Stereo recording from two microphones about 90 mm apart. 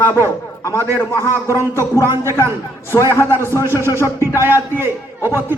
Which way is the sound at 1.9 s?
30° right (ahead or behind).